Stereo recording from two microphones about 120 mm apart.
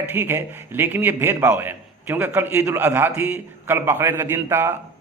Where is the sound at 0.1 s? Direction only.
20° right (ahead or behind).